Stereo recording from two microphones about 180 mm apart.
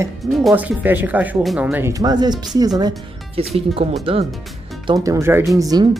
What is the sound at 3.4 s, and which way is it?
Speech, 30° right (ahead or behind).